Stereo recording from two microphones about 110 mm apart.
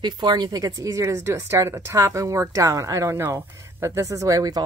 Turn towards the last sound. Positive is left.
turn(degrees=-30)  # may be behind; listen again after turning